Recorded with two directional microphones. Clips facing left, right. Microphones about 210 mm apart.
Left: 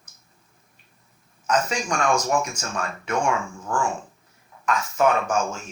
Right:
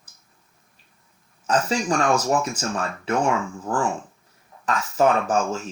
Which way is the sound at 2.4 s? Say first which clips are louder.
Right 2 dB; 30° right (ahead or behind).